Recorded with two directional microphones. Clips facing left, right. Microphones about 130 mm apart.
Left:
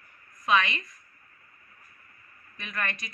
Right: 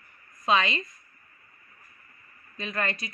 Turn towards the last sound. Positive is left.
turn(degrees=-25)  # may be behind; listen again after turning